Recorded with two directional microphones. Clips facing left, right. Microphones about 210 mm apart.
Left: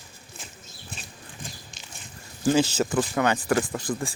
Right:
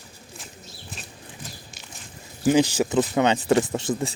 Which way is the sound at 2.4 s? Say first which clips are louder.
Right 3 dB; 15° right (ahead or behind).